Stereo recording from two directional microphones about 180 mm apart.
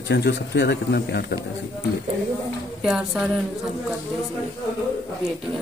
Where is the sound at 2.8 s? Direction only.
5° right (ahead or behind).